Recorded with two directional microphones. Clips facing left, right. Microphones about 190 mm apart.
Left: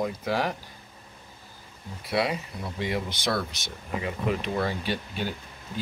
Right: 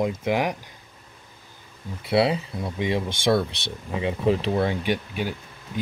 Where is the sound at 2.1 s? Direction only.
30° right (ahead or behind).